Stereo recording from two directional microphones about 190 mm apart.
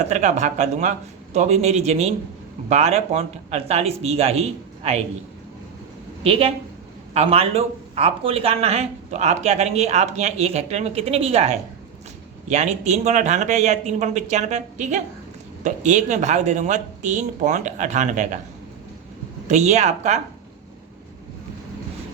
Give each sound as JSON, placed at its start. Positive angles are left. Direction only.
{"t": 0.0, "sound": "speech", "side_deg": -40}
{"t": 6.2, "sound": "speech", "side_deg": -30}
{"t": 19.5, "sound": "speech", "side_deg": -35}